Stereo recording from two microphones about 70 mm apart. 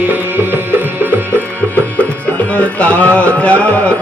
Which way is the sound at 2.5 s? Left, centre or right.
Centre.